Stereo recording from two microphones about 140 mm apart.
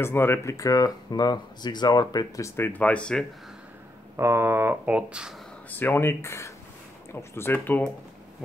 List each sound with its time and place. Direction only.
0.0 s speech: 15° left (ahead or behind)
4.2 s speech: 15° right (ahead or behind)
5.7 s speech: 15° left (ahead or behind)